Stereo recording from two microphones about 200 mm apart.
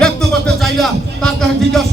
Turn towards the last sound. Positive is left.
turn(degrees=5)  # may be behind; listen again after turning